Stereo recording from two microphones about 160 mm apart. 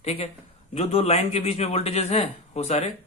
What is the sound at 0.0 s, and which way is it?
A man's voice, 40° left (ahead or behind).